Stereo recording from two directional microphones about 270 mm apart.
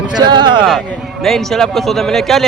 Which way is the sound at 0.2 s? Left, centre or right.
Centre.